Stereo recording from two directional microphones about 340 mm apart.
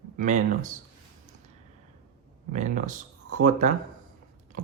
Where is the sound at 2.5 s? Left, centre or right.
Right.